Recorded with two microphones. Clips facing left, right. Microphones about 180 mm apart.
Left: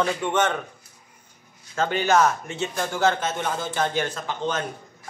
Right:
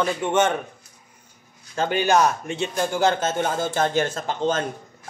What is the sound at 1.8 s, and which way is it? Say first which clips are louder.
Speech: right 1 dB; 15° right (ahead or behind).